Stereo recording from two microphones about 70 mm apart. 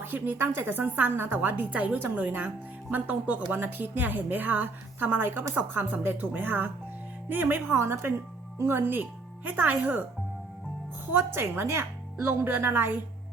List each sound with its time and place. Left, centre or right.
0.0 s a woman's voice: right
11.1 s speech: right